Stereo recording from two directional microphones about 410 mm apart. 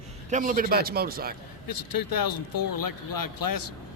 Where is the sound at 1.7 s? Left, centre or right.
Left.